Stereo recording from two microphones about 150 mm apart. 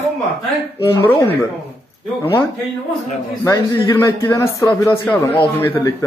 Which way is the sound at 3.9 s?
20° left (ahead or behind).